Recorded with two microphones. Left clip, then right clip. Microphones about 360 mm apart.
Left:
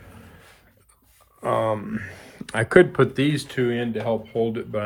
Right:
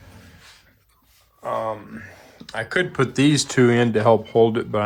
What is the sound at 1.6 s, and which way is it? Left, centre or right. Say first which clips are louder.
Speech: left 3 dB; left.